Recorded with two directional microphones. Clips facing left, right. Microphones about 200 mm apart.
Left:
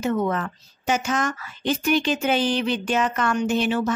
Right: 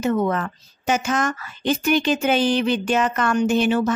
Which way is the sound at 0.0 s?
50° right (ahead or behind).